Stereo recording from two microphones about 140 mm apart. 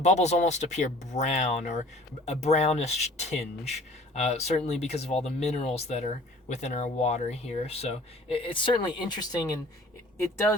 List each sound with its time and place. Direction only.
0.0 s speech: 55° left (ahead or behind); by 9.5 s 30° left (ahead or behind)